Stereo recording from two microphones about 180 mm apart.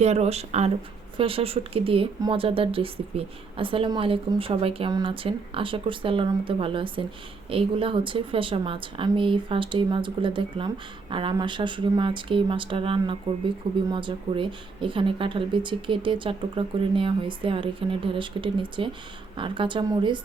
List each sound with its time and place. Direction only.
0.0 s speech: 35° right (ahead or behind)